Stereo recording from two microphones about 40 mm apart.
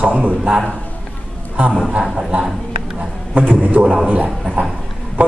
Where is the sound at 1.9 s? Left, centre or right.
Right.